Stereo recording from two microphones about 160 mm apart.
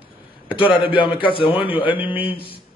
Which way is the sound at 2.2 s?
35° left (ahead or behind).